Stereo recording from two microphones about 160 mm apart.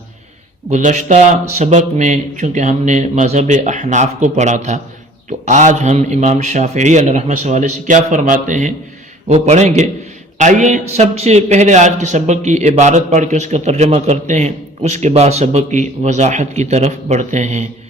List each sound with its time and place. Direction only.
0.7 s a man's voice: 50° right (ahead or behind)